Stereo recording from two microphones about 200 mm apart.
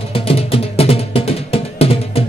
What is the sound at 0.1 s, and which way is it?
Music, 30° left (ahead or behind).